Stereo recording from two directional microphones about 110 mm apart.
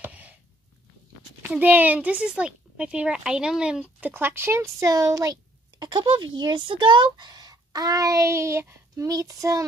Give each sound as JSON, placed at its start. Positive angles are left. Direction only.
{"t": 0.0, "sound": "a sound", "side_deg": -15}
{"t": 1.5, "sound": "speech", "side_deg": -15}
{"t": 4.0, "sound": "speech", "side_deg": -20}